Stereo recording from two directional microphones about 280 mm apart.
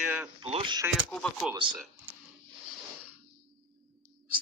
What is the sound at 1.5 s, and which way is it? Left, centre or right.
Speech, centre.